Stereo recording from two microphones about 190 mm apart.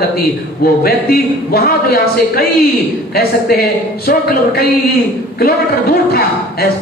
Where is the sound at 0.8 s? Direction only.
50° left (ahead or behind).